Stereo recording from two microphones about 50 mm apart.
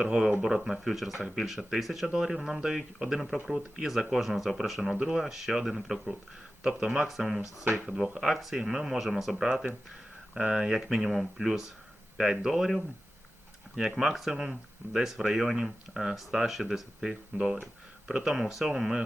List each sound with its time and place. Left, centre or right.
0.0 s speech: centre
7.7 s speech: centre
8.2 s speech: centre
9.5 s speech: centre
13.7 s speech: centre